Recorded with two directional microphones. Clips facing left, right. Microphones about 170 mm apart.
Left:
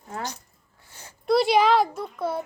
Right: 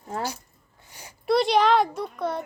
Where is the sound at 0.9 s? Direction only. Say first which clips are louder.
Right 1 dB; 15° right (ahead or behind).